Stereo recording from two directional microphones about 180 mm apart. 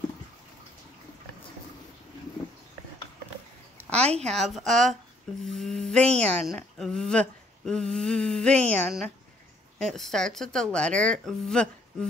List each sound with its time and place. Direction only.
4.0 s a woman's voice: 35° right (ahead or behind)
4.3 s speech: centre (ahead or behind)